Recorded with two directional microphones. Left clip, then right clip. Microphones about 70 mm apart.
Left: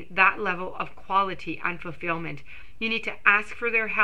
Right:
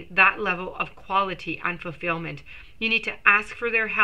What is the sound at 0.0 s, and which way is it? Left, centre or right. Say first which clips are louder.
Speech: right 2 dB; left.